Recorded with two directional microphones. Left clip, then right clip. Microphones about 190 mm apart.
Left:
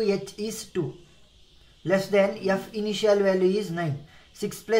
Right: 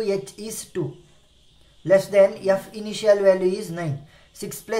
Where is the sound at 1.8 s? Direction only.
30° right (ahead or behind).